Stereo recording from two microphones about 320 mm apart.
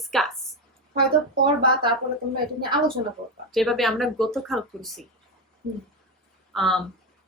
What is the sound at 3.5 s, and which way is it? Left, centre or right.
Speech, centre.